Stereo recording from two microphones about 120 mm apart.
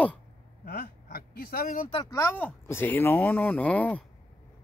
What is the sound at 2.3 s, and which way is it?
Speech, 15° left (ahead or behind).